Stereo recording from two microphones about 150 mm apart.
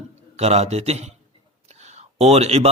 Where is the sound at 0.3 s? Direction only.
45° right (ahead or behind).